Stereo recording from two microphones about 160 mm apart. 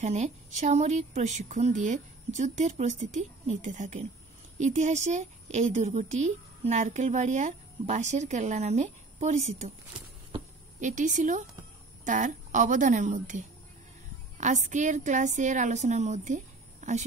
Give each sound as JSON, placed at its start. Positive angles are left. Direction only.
{"t": 0.0, "sound": "a woman's voice", "side_deg": -45}
{"t": 10.8, "sound": "a woman's voice", "side_deg": -50}
{"t": 14.4, "sound": "a woman's voice", "side_deg": -50}